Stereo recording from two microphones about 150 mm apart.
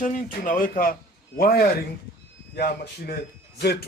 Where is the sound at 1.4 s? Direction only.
80° left.